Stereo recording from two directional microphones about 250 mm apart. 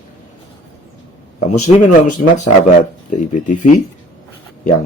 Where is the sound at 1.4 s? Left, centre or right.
Left.